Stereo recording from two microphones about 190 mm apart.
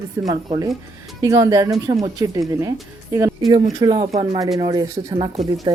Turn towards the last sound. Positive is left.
turn(degrees=-25)  # may be behind; listen again after turning